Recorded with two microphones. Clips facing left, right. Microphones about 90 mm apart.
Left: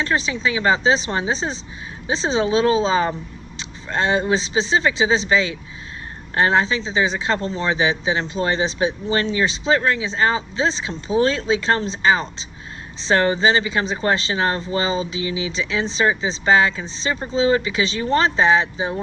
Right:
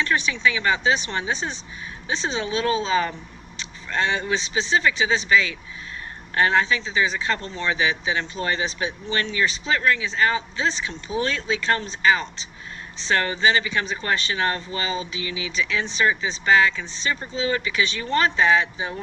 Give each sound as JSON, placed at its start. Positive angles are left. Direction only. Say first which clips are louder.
{"t": 0.0, "sound": "speech", "louder": "left 1 dB", "side_deg": 30}